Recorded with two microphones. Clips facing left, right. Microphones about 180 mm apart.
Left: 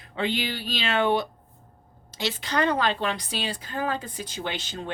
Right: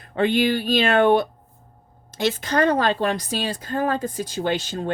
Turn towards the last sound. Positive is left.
turn(degrees=-40)  # may be behind; listen again after turning